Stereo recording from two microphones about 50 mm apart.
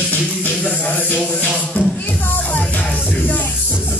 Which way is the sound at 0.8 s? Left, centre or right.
Left.